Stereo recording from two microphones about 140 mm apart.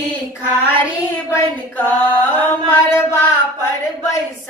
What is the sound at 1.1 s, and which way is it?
Female singing, 10° left (ahead or behind).